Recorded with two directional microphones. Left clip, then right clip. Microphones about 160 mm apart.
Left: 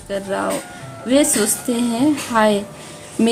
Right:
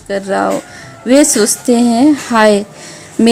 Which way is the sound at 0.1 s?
35° right (ahead or behind).